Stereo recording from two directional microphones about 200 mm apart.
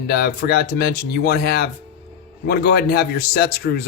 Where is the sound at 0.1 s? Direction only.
50° left (ahead or behind).